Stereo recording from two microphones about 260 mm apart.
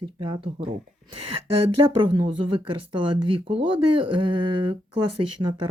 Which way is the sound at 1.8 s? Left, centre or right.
Centre.